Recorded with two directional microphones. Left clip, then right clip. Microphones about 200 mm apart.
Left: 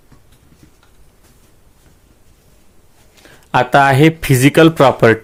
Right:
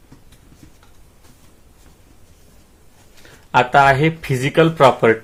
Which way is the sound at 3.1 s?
55° left (ahead or behind).